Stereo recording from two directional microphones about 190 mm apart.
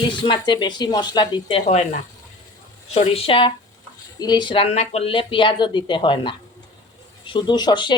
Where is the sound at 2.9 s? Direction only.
35° left (ahead or behind).